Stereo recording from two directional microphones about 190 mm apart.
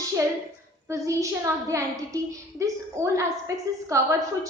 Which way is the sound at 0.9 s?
15° right (ahead or behind).